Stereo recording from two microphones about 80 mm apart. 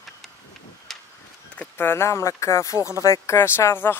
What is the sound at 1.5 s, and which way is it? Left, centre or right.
Speech, left.